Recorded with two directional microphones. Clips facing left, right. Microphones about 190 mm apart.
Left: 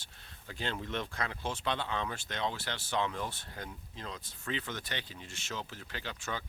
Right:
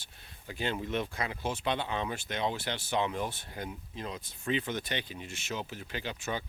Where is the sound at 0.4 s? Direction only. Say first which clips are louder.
Right 4 dB; 10° right (ahead or behind).